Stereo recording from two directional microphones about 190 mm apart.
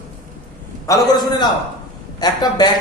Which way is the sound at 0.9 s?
20° left (ahead or behind).